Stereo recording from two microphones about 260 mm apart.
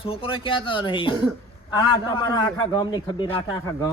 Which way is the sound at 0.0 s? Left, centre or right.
Left.